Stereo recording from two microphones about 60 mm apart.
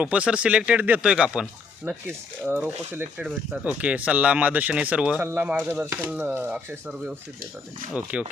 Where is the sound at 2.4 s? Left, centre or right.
Right.